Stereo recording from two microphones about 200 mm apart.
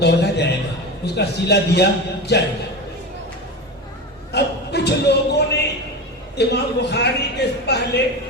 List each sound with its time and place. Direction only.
0.0 s a man's voice: 55° left (ahead or behind)
4.3 s a sound: 55° left (ahead or behind)
6.3 s speech: 55° left (ahead or behind)